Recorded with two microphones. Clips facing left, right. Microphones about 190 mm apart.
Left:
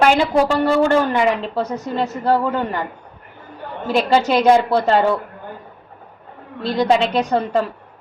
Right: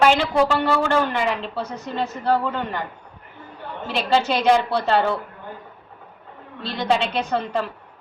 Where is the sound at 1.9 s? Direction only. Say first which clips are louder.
Left 3 dB; 45° left (ahead or behind).